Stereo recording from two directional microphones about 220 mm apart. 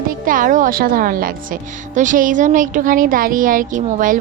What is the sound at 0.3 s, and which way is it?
A woman's voice, 40° right (ahead or behind).